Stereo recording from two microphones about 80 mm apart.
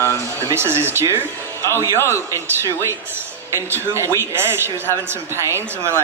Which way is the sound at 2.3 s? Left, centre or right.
Right.